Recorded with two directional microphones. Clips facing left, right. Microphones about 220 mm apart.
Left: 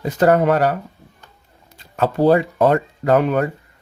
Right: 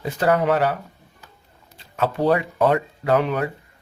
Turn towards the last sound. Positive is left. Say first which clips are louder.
# left 4 dB
turn(degrees=45)  # may be behind; listen again after turning